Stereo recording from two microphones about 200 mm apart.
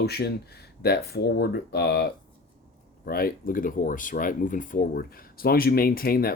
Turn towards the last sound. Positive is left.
turn(degrees=50)  # may be behind; listen again after turning